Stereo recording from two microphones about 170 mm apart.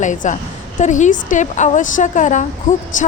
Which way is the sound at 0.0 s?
45° left (ahead or behind).